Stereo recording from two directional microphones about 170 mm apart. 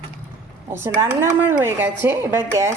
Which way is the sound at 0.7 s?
15° right (ahead or behind).